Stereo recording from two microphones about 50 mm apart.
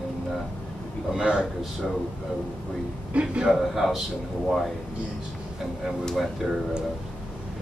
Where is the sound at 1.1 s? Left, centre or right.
Centre.